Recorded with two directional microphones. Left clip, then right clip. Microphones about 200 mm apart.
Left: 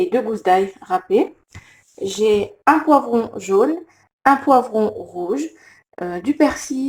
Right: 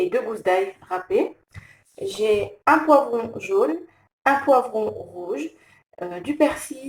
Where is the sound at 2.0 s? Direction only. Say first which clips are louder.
Left 4 dB; 30° left (ahead or behind).